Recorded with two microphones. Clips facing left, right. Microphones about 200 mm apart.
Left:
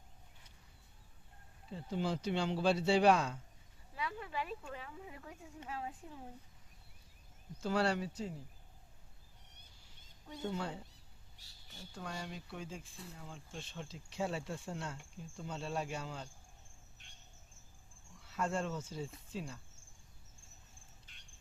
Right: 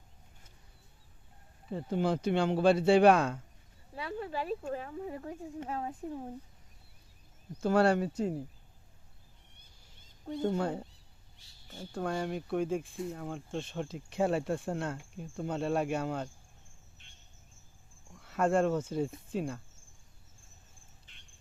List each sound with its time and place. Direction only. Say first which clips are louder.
1.7 s speech: right 7 dB; 55° right (ahead or behind)
3.9 s speech: right 5 dB; 35° right (ahead or behind)
7.6 s speech: right 8 dB; 50° right (ahead or behind)
10.2 s speech: right 9 dB; 50° right (ahead or behind)
18.1 s speech: right 9 dB; 55° right (ahead or behind)